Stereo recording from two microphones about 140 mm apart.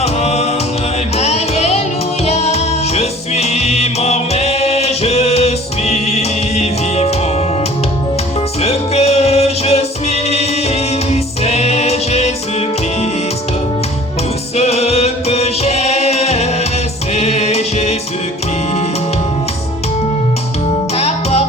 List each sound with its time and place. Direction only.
0.0 s music: 50° left (ahead or behind)
8.6 s music: 50° left (ahead or behind)
14.5 s music: 50° left (ahead or behind)
20.9 s music: 50° left (ahead or behind)